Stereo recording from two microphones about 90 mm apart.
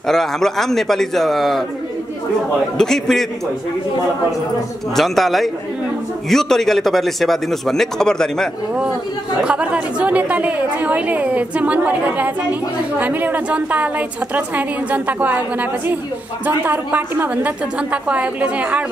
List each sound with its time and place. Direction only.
0.0 s a man's voice: 5° left (ahead or behind)
2.8 s a man's voice: 5° left (ahead or behind)
4.9 s a man's voice: centre (ahead or behind)
9.4 s a woman's voice: 10° right (ahead or behind)